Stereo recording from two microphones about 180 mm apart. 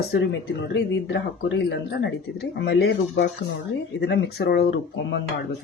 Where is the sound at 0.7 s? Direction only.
80° left; by 4.8 s 60° left (ahead or behind).